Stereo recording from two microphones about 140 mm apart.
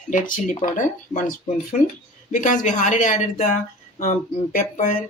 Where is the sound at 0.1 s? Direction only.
65° left (ahead or behind).